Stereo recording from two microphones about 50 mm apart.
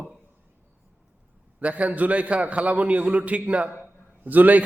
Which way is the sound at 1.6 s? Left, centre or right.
Right.